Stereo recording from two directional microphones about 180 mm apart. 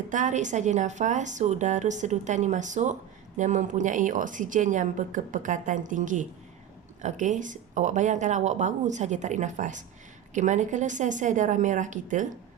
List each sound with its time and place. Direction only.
0.1 s a woman's voice: 45° right (ahead or behind)